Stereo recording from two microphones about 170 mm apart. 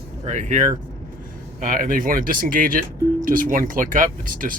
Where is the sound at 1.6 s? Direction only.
55° right (ahead or behind).